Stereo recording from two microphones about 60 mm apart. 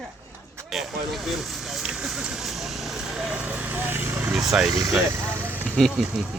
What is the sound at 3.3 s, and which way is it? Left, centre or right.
Vehicle, right.